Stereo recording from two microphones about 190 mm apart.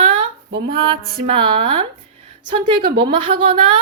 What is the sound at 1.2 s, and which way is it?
A woman's voice, 30° right (ahead or behind).